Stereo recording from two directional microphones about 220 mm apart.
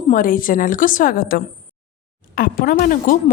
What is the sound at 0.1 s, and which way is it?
A woman's voice, 40° left (ahead or behind).